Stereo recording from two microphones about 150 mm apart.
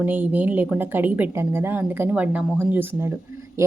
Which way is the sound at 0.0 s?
10° right (ahead or behind).